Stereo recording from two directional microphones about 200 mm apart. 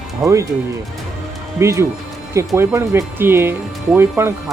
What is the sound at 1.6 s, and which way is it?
Speech, 15° right (ahead or behind).